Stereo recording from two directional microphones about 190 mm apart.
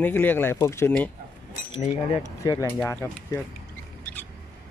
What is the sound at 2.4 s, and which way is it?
Speech, 15° left (ahead or behind).